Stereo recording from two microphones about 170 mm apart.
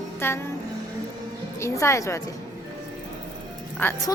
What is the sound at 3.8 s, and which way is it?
Speech, 15° left (ahead or behind).